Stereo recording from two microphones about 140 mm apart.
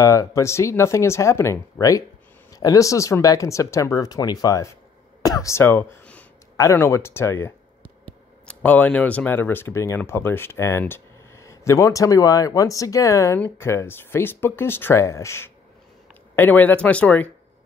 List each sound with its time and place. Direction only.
0.0 s speech: 25° left (ahead or behind)